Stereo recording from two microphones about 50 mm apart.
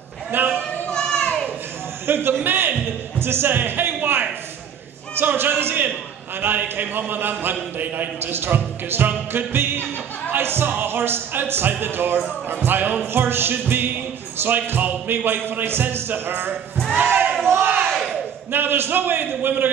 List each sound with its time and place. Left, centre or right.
0.3 s a man's voice: right
0.8 s children playing: centre
2.0 s a man's voice: right
8.3 s a man's voice: right
17.5 s a sound: right
17.8 s battle cry: centre
18.5 s a man's voice: right